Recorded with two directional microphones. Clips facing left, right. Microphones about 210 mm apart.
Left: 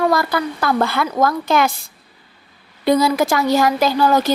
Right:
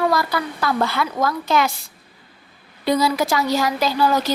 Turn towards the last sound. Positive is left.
turn(degrees=50)  # may be behind; listen again after turning